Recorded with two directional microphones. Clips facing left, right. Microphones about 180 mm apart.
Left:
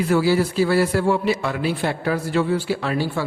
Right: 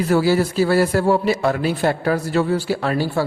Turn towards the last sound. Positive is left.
turn(degrees=-40)  # may be behind; listen again after turning